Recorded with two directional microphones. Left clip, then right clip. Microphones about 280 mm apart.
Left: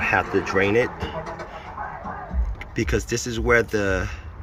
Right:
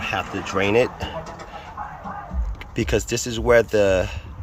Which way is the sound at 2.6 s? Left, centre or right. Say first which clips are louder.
Right 2 dB; centre.